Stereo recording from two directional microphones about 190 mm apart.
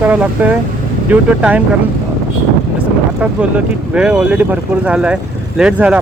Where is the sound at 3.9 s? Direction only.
5° right (ahead or behind).